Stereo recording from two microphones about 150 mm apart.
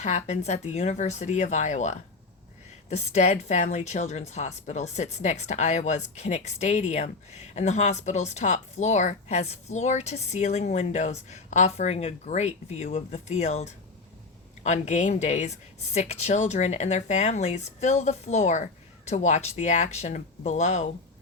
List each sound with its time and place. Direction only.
0.0 s a woman's voice: 50° left (ahead or behind)